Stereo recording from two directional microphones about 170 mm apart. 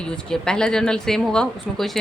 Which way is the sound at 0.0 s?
5° left (ahead or behind).